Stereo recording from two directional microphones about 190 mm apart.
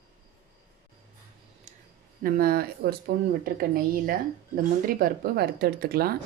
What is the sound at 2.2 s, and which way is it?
Speech, 50° right (ahead or behind).